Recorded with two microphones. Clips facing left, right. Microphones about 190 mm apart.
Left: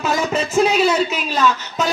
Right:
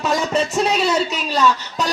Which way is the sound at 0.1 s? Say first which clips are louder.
Left 1 dB; centre (ahead or behind).